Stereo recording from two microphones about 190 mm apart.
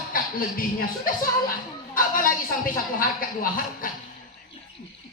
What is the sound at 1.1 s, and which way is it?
Speech, 45° left (ahead or behind).